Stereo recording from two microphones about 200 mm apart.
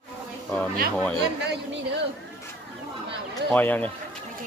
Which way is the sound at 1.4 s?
60° right (ahead or behind).